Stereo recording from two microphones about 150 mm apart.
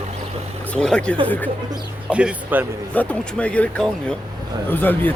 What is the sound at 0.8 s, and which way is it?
Speech, 5° left (ahead or behind).